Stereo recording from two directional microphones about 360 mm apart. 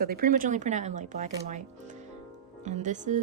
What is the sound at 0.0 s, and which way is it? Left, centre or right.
Speech, right.